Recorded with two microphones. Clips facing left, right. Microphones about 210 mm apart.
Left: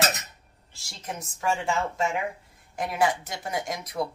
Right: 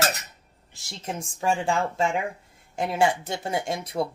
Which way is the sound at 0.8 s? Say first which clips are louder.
Right 3 dB; 25° right (ahead or behind).